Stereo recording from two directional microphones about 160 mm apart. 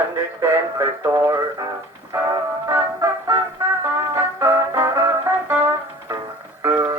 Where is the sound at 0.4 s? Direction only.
15° right (ahead or behind).